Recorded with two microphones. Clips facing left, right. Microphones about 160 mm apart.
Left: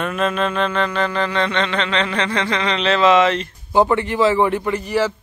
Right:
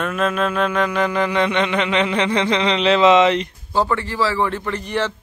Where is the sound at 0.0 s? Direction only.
Centre (ahead or behind); by 3.4 s 20° right (ahead or behind).